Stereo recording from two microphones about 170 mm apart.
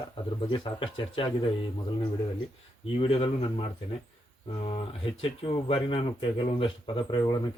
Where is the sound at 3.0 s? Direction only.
35° left (ahead or behind).